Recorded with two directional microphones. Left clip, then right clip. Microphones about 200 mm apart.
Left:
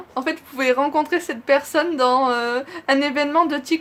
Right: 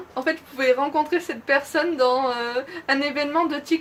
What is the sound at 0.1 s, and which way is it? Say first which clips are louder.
Speech: even; 35° left (ahead or behind).